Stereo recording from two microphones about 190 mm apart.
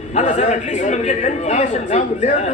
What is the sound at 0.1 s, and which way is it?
A man's voice, 35° left (ahead or behind).